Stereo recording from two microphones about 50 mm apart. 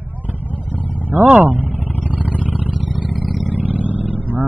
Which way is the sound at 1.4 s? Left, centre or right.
Right.